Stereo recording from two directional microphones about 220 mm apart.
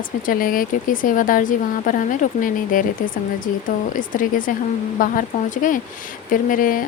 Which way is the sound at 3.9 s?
35° left (ahead or behind).